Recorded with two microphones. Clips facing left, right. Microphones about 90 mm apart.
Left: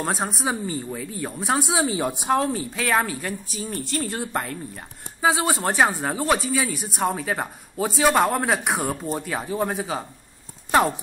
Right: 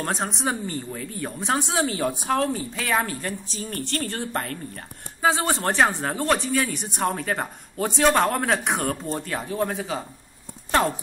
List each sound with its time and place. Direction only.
0.0 s speech: 5° left (ahead or behind)
2.7 s speech: 5° left (ahead or behind)
3.0 s speech: 15° left (ahead or behind)